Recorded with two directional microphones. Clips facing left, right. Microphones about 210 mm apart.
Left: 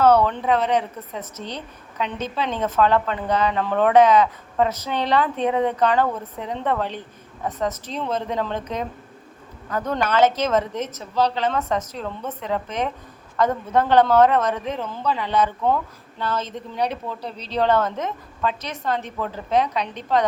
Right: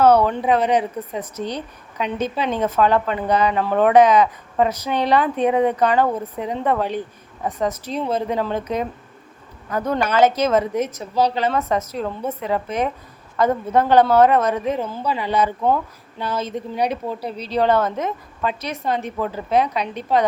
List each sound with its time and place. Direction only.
0.0 s a woman's voice: 10° right (ahead or behind)